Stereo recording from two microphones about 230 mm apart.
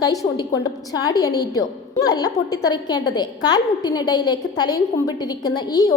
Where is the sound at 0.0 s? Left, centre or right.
Centre.